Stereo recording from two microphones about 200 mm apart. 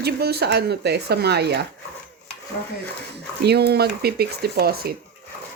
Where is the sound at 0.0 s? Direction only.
55° right (ahead or behind).